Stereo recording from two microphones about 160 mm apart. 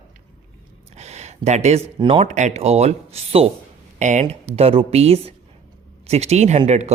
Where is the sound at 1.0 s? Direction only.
45° right (ahead or behind).